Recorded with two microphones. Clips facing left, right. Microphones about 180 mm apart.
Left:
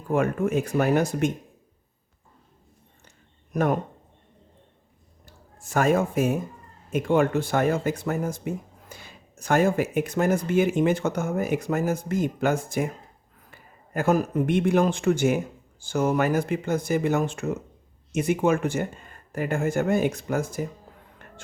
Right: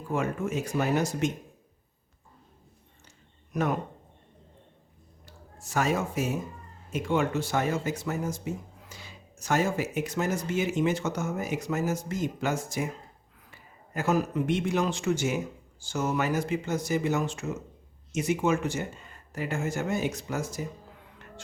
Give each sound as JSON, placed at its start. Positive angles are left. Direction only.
{"t": 0.1, "sound": "speech", "side_deg": 60}
{"t": 3.5, "sound": "speech", "side_deg": 50}
{"t": 5.2, "sound": "a man's voice", "side_deg": 50}